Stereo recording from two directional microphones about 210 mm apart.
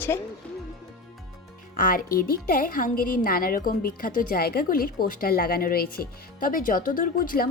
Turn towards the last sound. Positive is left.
turn(degrees=40)  # may be behind; listen again after turning